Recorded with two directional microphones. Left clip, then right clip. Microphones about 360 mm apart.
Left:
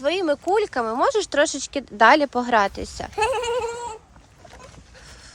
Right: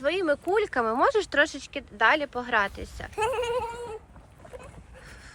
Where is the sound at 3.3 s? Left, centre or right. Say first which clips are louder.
Left 1 dB; left.